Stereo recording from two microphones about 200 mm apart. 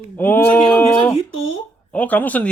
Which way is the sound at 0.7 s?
10° left (ahead or behind).